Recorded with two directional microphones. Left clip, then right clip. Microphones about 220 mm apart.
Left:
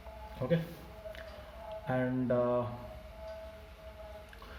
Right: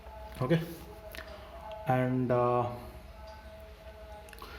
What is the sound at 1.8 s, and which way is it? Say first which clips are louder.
Speech: right 4 dB; 45° right (ahead or behind).